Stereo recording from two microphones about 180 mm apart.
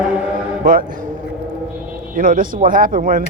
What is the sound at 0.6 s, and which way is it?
Speech, 50° right (ahead or behind).